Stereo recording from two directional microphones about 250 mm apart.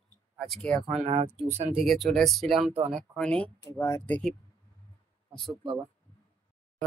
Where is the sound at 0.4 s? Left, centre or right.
Centre.